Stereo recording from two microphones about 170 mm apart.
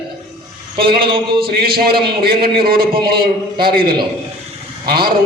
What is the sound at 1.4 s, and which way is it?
A man's voice, 65° right (ahead or behind).